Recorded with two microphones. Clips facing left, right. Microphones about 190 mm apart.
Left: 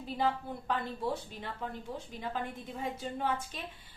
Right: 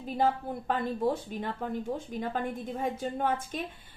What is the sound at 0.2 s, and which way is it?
A woman's voice, 45° right (ahead or behind).